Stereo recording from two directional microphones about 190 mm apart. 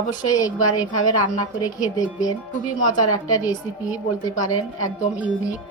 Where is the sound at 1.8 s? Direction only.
20° left (ahead or behind).